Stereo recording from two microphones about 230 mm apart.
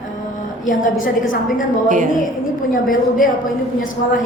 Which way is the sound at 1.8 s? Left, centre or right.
Right.